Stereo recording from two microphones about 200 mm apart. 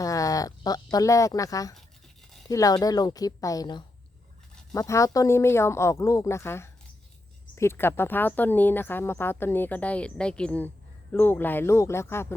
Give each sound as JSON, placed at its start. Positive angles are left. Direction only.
{"t": 0.0, "sound": "a woman's voice", "side_deg": 15}